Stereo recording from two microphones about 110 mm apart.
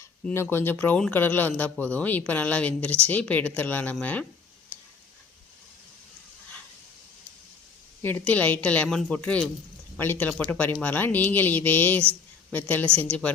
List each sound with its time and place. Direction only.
0.3 s speech: 20° left (ahead or behind)
8.0 s speech: 15° left (ahead or behind)